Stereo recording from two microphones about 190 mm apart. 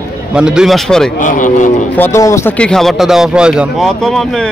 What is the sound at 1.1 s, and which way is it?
Speech, 45° left (ahead or behind).